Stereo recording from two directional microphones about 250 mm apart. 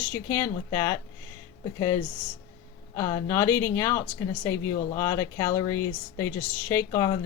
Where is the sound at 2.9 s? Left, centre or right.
Centre.